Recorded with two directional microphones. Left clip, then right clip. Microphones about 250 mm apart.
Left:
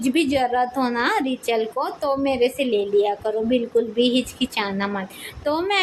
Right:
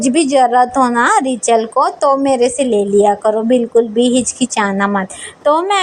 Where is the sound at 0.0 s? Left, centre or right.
Right.